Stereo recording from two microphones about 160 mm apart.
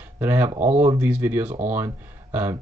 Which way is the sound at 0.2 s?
10° right (ahead or behind).